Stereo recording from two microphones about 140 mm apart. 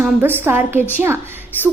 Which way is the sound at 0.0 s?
15° right (ahead or behind).